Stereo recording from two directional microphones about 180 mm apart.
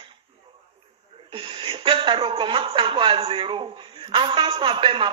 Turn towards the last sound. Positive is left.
turn(degrees=-30)  # may be behind; listen again after turning